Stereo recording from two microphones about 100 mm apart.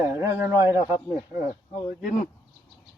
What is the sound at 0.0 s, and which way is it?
Speech, 20° right (ahead or behind).